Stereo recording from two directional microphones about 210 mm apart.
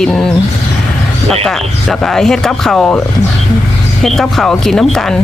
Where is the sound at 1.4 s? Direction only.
Centre (ahead or behind).